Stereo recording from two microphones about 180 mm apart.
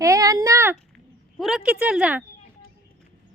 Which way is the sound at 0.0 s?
20° right (ahead or behind).